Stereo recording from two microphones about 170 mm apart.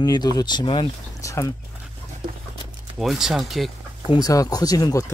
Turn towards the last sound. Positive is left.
turn(degrees=20)  # may be behind; listen again after turning